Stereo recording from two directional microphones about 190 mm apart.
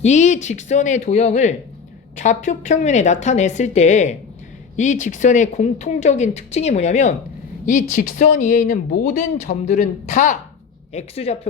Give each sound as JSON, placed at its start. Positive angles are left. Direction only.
{"t": 0.0, "sound": "speech", "side_deg": 40}